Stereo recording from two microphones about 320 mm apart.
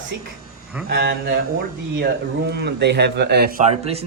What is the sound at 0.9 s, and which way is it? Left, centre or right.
Speech, right.